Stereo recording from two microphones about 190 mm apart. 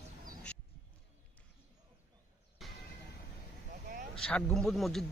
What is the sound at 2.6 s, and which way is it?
Music, centre (ahead or behind).